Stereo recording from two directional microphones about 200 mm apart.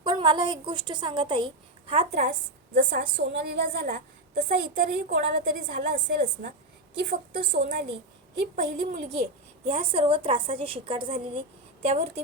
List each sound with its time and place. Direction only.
0.0 s a woman's voice: 25° right (ahead or behind)
2.1 s a woman's voice: 55° right (ahead or behind)
9.6 s a woman's voice: 30° right (ahead or behind)